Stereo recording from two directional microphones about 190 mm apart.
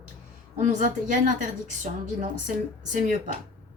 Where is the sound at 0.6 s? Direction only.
40° right (ahead or behind).